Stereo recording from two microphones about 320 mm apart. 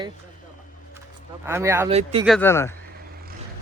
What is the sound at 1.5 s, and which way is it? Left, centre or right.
Speech, centre.